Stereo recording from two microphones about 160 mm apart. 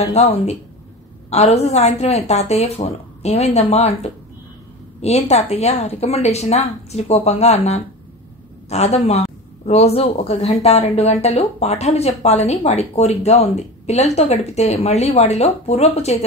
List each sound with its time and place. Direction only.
0.0 s a woman's voice: 45° left (ahead or behind)